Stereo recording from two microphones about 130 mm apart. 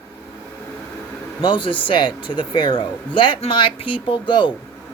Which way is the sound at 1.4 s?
40° left (ahead or behind).